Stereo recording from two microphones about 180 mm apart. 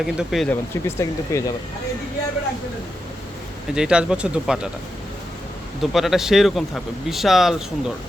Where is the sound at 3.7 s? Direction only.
5° right (ahead or behind).